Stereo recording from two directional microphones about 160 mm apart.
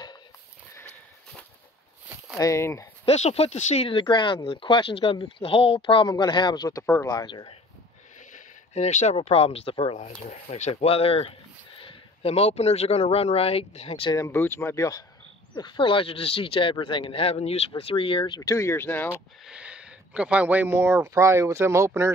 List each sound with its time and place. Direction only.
2.3 s speech: 20° left (ahead or behind)
3.1 s speech: 40° left (ahead or behind)
6.8 s speech: 15° left (ahead or behind)
8.3 s speech: 45° left (ahead or behind)
14.1 s speech: 15° left (ahead or behind)
19.4 s speech: 5° right (ahead or behind)